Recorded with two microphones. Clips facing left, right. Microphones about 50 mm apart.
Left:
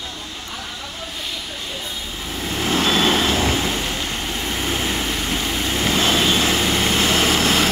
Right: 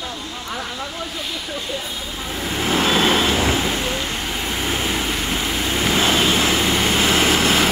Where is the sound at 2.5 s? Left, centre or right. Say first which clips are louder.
Right 1 dB; centre.